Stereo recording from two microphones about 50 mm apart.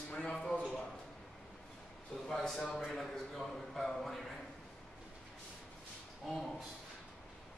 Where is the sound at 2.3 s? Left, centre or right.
Centre.